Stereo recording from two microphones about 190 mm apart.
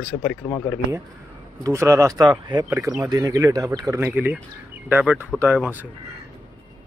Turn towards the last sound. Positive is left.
turn(degrees=-10)  # may be behind; listen again after turning